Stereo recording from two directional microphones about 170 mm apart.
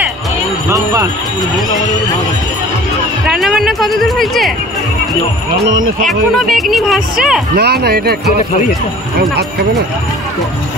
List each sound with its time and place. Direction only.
0.7 s speech: 20° right (ahead or behind)
3.3 s speech: centre (ahead or behind)
6.0 s speech: centre (ahead or behind)
7.5 s speech: 70° right (ahead or behind)